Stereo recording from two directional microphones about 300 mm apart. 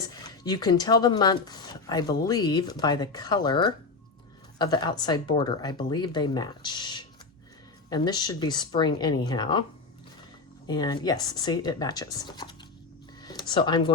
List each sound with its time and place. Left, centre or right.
0.1 s speech: centre
10.7 s speech: centre
13.2 s a sound: centre